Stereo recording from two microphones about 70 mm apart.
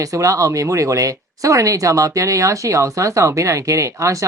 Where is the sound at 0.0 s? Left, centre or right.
Right.